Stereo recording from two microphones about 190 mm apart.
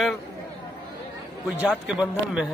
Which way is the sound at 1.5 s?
10° right (ahead or behind).